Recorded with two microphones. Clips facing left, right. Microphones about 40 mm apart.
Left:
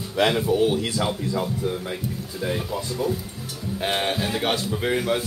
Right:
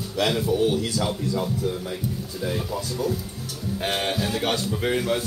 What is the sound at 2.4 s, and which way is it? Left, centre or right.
Speech, left.